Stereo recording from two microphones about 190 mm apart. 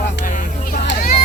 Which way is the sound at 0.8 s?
55° left (ahead or behind).